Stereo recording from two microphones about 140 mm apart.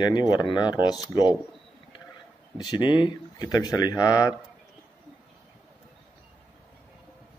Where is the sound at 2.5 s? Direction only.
30° left (ahead or behind).